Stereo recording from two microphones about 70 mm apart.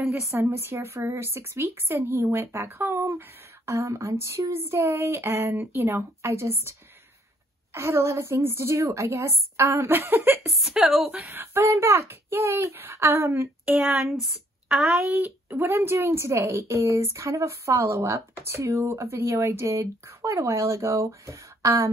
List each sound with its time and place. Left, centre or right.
0.3 s a woman's voice: right
7.7 s a woman's voice: right
10.5 s a woman's voice: centre
11.2 s a woman's voice: right
14.2 s speech: centre
15.0 s a woman's voice: right